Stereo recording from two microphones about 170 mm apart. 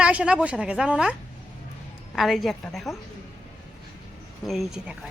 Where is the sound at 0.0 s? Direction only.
5° right (ahead or behind).